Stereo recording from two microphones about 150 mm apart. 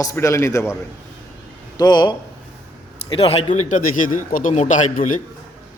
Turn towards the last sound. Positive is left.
turn(degrees=55)  # may be behind; listen again after turning